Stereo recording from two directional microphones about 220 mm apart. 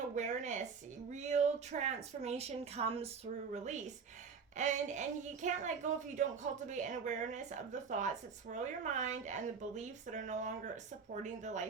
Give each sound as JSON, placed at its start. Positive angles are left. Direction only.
{"t": 0.2, "sound": "a woman's voice", "side_deg": -35}